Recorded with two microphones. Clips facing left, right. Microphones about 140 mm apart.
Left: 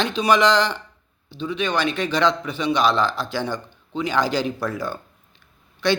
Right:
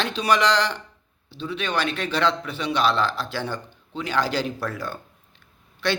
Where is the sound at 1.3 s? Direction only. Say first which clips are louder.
Left 4 dB; 15° left (ahead or behind).